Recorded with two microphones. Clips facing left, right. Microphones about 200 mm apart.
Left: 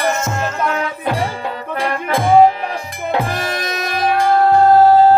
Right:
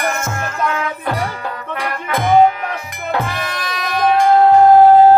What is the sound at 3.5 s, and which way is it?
Music, 45° left (ahead or behind).